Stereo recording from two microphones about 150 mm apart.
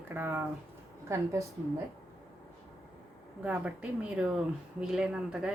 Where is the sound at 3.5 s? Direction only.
10° right (ahead or behind).